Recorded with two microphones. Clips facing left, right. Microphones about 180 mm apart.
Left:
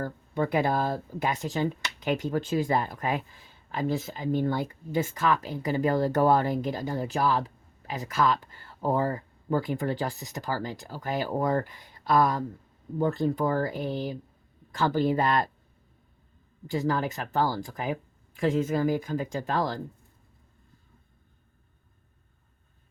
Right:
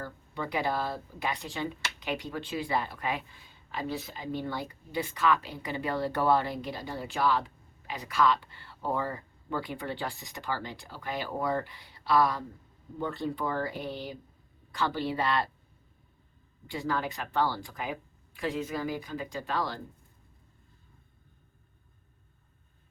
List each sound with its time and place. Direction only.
0.0 s speech: 45° left (ahead or behind)
16.6 s speech: 40° left (ahead or behind)